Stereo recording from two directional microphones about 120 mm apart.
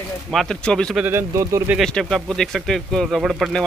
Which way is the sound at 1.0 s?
20° right (ahead or behind).